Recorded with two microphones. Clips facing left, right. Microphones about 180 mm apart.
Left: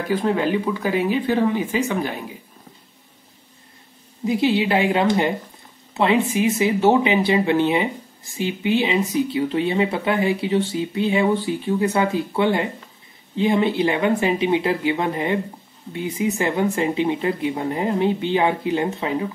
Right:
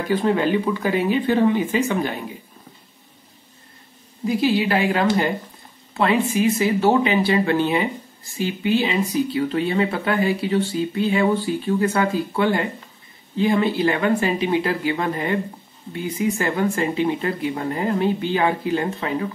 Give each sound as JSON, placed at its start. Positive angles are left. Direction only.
{"t": 0.1, "sound": "speech", "side_deg": 5}
{"t": 4.2, "sound": "speech", "side_deg": 20}